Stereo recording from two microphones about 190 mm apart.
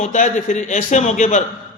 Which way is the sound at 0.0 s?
40° left (ahead or behind).